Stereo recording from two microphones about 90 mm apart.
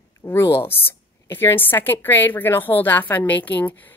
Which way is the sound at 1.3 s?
25° left (ahead or behind).